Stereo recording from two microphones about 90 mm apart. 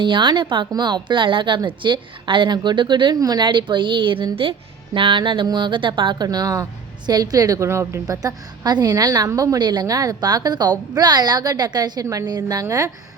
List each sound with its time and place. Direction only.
0.0 s a woman's voice: 60° right (ahead or behind)
6.2 s a woman's voice: 45° right (ahead or behind)
9.6 s a woman's voice: 55° right (ahead or behind); by 12.9 s 35° right (ahead or behind)